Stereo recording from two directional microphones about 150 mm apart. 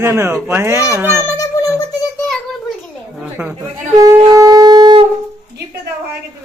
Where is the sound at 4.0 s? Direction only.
25° right (ahead or behind).